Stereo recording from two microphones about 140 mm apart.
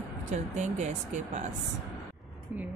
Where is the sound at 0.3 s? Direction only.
55° right (ahead or behind).